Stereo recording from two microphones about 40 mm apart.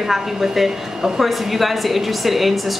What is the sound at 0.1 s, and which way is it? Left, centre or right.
A woman's voice, centre.